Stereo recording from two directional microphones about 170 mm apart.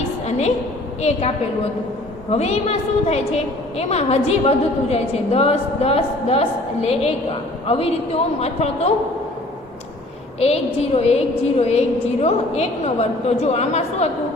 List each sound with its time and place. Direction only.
0.3 s a sound: 40° left (ahead or behind)
2.3 s a woman's voice: 40° left (ahead or behind)
10.4 s a woman's voice: 35° left (ahead or behind)